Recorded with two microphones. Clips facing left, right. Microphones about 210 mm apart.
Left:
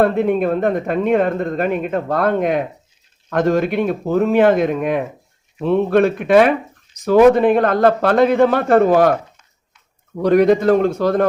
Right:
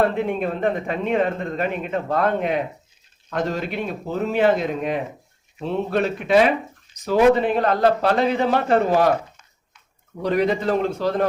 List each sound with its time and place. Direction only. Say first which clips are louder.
0.0 s speech: left 6 dB; 45° left (ahead or behind)
10.2 s speech: left 8 dB; 55° left (ahead or behind)